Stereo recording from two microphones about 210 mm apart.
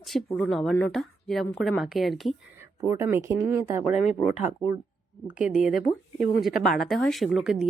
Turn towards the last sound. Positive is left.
turn(degrees=0)  # may be behind; listen again after turning